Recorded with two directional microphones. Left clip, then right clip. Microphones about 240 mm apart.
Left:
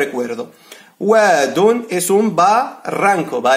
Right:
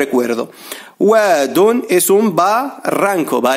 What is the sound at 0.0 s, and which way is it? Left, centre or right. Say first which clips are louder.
Speech: right 4 dB; right.